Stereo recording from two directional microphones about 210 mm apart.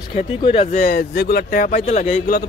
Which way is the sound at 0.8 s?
45° left (ahead or behind).